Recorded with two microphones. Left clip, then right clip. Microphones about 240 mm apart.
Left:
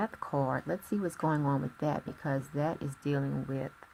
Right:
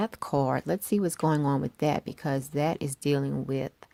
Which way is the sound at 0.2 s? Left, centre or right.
Right.